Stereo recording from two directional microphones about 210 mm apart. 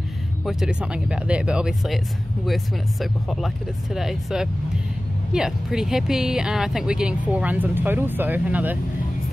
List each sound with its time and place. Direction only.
0.5 s speech: 5° right (ahead or behind)